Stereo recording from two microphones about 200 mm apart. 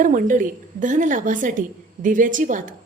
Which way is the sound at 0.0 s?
40° right (ahead or behind).